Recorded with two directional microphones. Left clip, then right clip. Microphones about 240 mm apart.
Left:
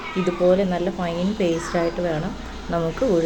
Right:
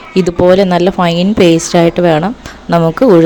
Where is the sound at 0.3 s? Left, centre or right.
Right.